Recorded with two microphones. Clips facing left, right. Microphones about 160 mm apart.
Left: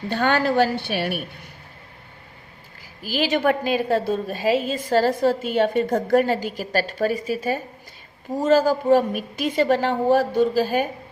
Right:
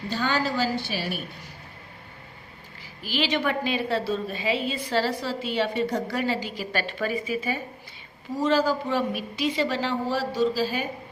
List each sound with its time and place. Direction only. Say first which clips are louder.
0.1 s a woman's voice: left 6 dB; 60° left (ahead or behind)
3.0 s a woman's voice: left 5 dB; 45° left (ahead or behind)